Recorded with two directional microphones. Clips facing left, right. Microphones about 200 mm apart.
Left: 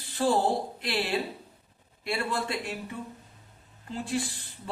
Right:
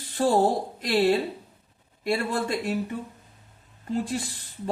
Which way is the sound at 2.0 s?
40° right (ahead or behind).